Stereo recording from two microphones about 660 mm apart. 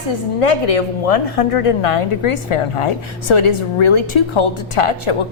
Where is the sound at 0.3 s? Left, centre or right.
Left.